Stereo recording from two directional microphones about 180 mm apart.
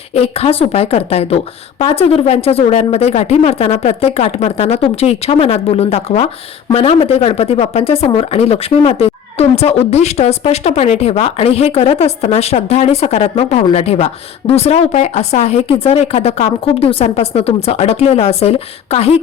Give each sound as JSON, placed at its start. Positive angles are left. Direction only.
{"t": 0.1, "sound": "speech", "side_deg": 35}